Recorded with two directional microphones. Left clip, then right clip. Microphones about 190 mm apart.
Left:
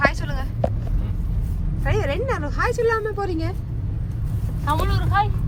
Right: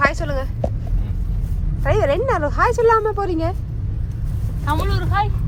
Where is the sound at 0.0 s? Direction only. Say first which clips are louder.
Right 3 dB; 20° right (ahead or behind).